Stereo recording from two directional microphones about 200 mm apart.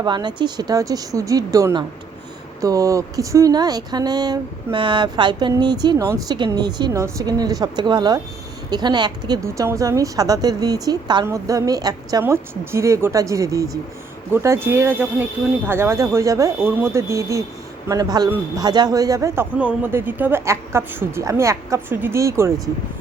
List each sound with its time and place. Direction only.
0.0 s a woman's voice: 20° right (ahead or behind)